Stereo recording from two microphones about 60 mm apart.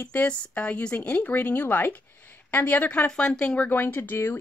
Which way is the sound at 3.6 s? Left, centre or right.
Left.